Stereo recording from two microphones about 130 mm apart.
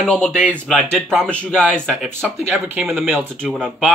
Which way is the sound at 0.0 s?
5° left (ahead or behind).